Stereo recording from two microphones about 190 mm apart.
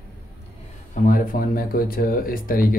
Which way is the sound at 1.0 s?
45° left (ahead or behind).